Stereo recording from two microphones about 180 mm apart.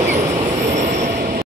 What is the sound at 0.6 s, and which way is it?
Train, 40° right (ahead or behind).